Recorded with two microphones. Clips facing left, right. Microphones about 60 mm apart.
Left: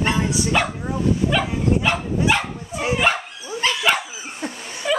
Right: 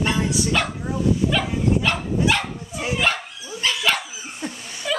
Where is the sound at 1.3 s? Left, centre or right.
Centre.